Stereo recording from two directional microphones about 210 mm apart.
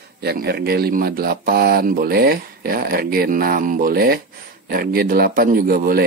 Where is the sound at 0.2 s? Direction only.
50° right (ahead or behind).